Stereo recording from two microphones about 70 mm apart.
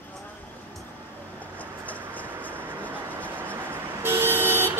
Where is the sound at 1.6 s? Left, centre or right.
Left.